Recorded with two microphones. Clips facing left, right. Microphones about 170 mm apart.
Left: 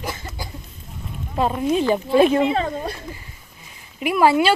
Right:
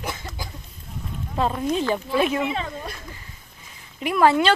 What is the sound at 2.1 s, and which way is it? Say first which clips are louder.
Speech: left 9 dB; 30° left (ahead or behind).